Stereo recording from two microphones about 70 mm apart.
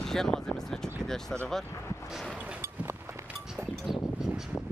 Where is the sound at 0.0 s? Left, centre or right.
Centre.